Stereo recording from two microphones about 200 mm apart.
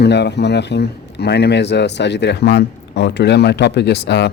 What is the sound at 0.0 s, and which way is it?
Speech, 60° left (ahead or behind).